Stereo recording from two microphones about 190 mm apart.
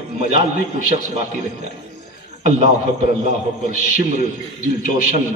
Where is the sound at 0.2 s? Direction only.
40° right (ahead or behind).